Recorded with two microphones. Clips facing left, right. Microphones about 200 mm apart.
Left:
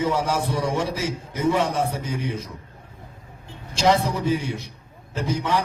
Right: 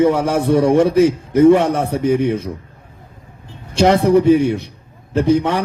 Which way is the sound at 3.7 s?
60° right (ahead or behind).